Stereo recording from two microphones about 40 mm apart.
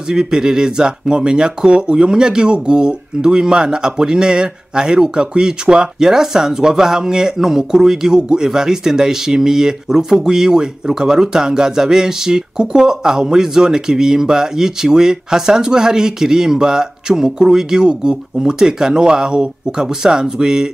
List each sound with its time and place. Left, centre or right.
0.1 s speech: centre